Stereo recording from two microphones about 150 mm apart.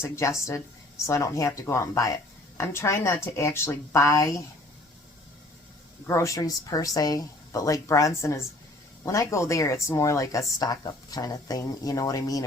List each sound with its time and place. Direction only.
0.0 s speech: 20° left (ahead or behind)
6.1 s speech: 20° left (ahead or behind)